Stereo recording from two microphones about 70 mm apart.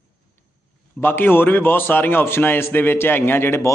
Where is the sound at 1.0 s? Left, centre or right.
Left.